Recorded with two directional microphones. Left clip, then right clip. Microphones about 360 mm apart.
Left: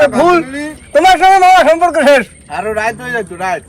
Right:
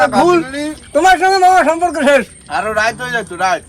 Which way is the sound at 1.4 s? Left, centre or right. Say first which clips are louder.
Left 3 dB; centre.